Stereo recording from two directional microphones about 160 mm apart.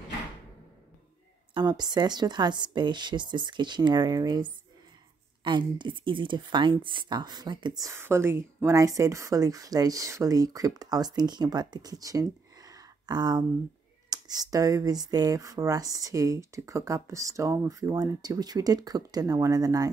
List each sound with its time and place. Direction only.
1.5 s speech: 25° right (ahead or behind)